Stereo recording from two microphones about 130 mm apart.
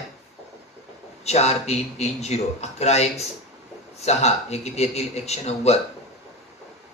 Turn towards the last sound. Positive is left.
turn(degrees=55)  # may be behind; listen again after turning